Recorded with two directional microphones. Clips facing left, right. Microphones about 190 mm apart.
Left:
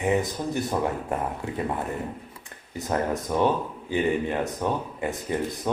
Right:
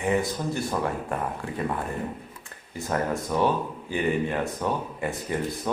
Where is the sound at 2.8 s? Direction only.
20° left (ahead or behind).